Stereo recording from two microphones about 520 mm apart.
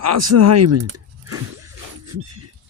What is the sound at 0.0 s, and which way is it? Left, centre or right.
Speech, right.